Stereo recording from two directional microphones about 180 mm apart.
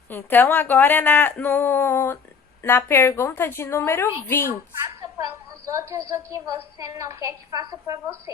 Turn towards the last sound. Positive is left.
turn(degrees=-20)  # may be behind; listen again after turning